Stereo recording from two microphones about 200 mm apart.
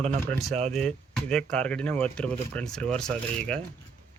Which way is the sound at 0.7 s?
Centre (ahead or behind).